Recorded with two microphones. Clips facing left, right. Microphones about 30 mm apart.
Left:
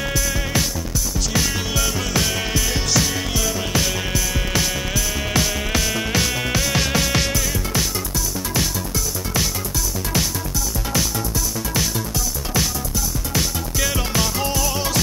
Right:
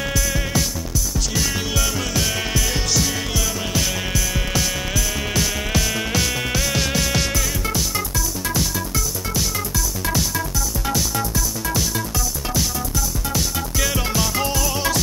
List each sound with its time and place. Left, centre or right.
1.4 s music: centre
2.2 s music: centre
3.0 s music: centre
6.5 s insect: centre
13.7 s music: centre